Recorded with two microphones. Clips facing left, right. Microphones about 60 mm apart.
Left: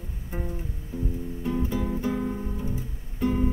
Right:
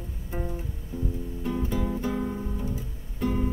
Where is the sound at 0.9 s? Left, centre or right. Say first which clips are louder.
Left 1 dB; left.